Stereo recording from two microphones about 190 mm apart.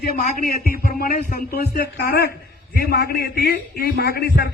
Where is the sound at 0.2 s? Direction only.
50° left (ahead or behind).